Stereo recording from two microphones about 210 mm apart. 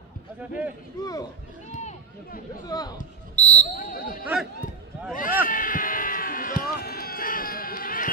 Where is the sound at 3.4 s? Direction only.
5° left (ahead or behind).